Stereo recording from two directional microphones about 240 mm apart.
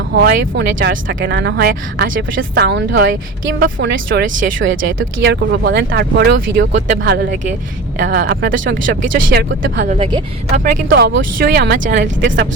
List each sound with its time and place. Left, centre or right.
0.1 s speech: right
4.1 s speech: right
4.9 s speech: right
9.9 s a woman's voice: right
10.8 s speech: right